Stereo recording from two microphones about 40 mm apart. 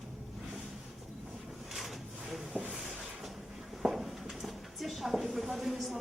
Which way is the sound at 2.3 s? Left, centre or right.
Centre.